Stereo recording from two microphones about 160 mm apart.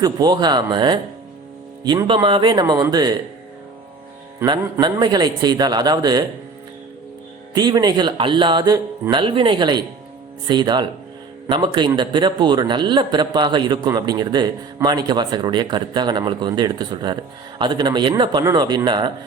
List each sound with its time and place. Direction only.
0.0 s a man's voice: 25° right (ahead or behind)
4.4 s a man's voice: 25° right (ahead or behind)
7.5 s a man's voice: 25° right (ahead or behind)